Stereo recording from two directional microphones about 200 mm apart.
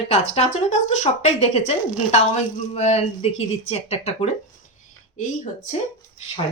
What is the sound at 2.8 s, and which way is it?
Speech, 30° left (ahead or behind).